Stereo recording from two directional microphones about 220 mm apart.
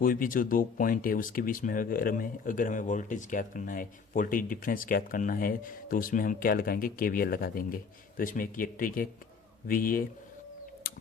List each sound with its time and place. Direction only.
0.0 s speech: 40° left (ahead or behind)